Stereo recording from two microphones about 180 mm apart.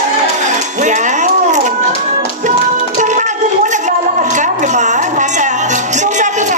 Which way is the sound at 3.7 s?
40° right (ahead or behind).